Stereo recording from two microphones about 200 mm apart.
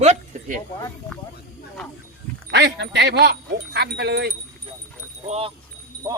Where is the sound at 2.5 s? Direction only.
60° right (ahead or behind).